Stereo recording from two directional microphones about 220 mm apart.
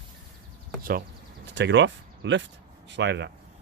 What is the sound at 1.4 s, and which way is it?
Speech, 55° right (ahead or behind).